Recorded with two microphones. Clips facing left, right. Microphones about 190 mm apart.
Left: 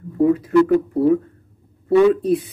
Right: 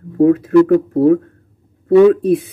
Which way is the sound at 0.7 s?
60° right (ahead or behind).